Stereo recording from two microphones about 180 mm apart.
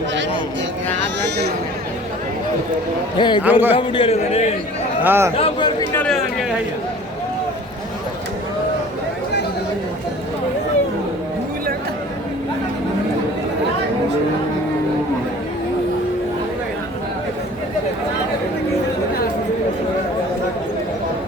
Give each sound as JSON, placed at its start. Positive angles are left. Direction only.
{"t": 3.2, "sound": "speech", "side_deg": 25}
{"t": 3.4, "sound": "a man's voice", "side_deg": -10}
{"t": 3.8, "sound": "a man's voice", "side_deg": 30}
{"t": 5.0, "sound": "a man's voice", "side_deg": -15}
{"t": 5.4, "sound": "speech", "side_deg": 25}
{"t": 5.9, "sound": "chatter", "side_deg": 5}